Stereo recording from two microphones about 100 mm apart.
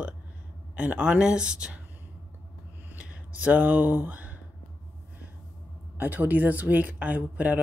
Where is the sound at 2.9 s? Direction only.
15° right (ahead or behind).